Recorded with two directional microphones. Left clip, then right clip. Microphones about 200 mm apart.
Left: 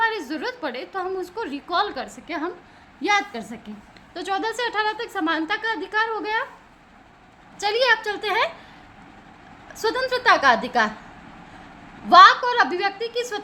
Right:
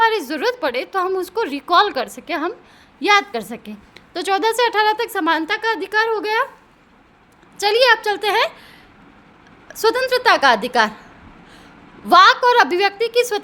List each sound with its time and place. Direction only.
0.0 s a woman's voice: 60° right (ahead or behind)
7.6 s a woman's voice: 45° right (ahead or behind)
9.6 s a woman's voice: 45° right (ahead or behind)
12.0 s a woman's voice: 55° right (ahead or behind)